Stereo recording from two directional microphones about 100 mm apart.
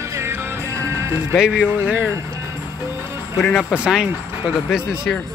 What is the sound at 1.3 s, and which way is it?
Speech, 5° right (ahead or behind).